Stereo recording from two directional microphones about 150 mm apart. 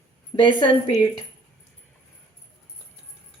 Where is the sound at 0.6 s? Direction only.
30° left (ahead or behind).